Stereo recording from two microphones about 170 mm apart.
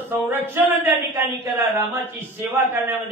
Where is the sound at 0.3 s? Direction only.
15° right (ahead or behind).